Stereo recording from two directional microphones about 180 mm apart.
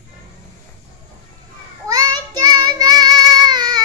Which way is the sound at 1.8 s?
20° right (ahead or behind).